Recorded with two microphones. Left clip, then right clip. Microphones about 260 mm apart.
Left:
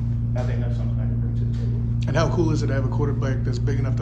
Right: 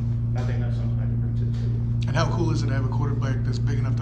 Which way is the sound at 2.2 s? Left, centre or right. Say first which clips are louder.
Left 4 dB; centre.